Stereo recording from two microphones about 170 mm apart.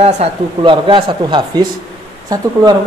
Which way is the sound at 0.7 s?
30° right (ahead or behind).